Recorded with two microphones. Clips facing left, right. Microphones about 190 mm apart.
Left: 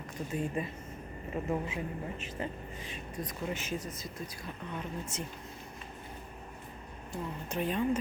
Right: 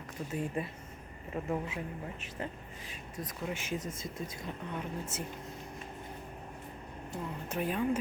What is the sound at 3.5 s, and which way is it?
Speech, 15° right (ahead or behind).